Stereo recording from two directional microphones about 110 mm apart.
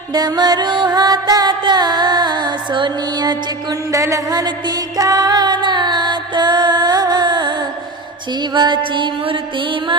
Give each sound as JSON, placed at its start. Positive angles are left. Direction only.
{"t": 0.1, "sound": "music", "side_deg": -40}